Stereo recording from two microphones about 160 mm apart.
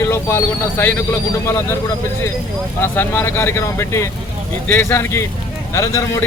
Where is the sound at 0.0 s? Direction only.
15° left (ahead or behind).